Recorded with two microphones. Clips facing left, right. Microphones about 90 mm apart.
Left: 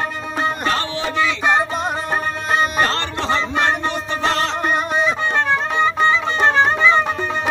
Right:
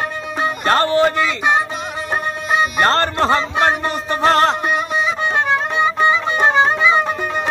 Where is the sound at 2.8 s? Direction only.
45° right (ahead or behind).